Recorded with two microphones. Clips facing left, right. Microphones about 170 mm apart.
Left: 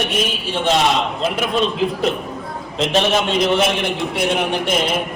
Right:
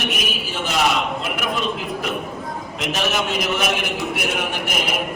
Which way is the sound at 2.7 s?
30° left (ahead or behind).